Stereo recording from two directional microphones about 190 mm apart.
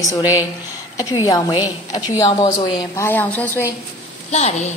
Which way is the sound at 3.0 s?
10° left (ahead or behind).